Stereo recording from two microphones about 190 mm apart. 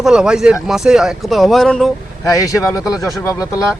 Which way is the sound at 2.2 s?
20° left (ahead or behind).